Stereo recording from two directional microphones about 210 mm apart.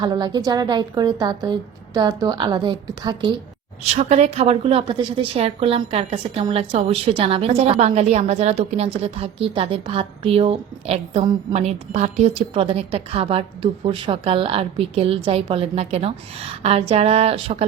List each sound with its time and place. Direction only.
0.0 s a woman's voice: 20° right (ahead or behind)